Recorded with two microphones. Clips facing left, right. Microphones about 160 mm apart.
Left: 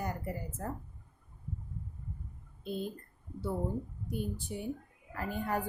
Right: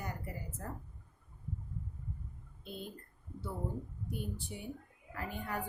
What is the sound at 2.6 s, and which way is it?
Speech, 40° left (ahead or behind).